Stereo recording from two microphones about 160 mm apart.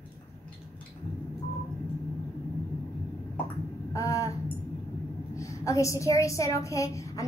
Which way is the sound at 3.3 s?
15° left (ahead or behind).